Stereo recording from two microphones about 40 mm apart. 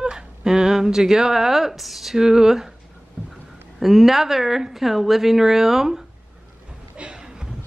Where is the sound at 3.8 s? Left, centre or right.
Centre.